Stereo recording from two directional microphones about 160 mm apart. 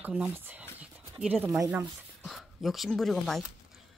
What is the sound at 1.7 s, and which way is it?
Speech, centre (ahead or behind).